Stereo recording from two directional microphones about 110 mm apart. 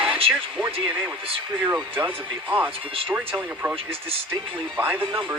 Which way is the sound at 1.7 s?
20° right (ahead or behind).